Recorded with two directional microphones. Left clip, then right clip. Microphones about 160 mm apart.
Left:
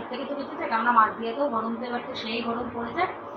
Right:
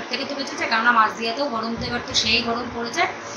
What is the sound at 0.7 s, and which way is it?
Speech, 15° right (ahead or behind).